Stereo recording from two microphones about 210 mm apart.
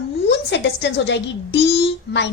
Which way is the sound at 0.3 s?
55° left (ahead or behind).